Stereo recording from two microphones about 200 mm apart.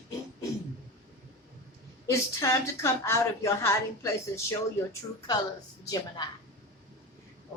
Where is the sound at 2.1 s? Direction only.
15° left (ahead or behind).